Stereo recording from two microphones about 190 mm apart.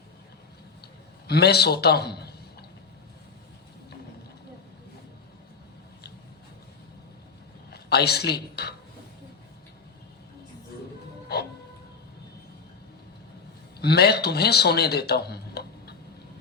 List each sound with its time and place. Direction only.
1.3 s a man's voice: 60° left (ahead or behind)
7.7 s speech: 60° left (ahead or behind)
13.7 s a man's voice: 55° left (ahead or behind)